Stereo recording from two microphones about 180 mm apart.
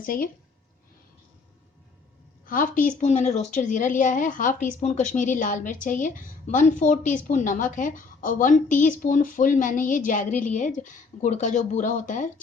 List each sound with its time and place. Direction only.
0.0 s a woman's voice: 50° left (ahead or behind)
2.5 s a woman's voice: 50° left (ahead or behind)